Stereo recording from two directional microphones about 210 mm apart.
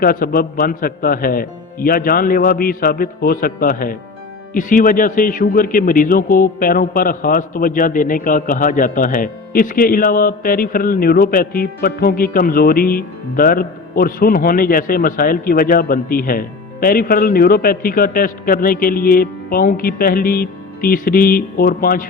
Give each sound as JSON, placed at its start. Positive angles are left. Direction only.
{"t": 0.0, "sound": "speech", "side_deg": 45}